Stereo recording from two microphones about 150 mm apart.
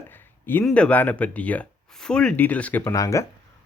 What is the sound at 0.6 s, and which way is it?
Speech, 5° left (ahead or behind).